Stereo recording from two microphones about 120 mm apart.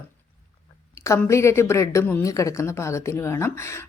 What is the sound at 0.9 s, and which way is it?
Speech, 25° left (ahead or behind).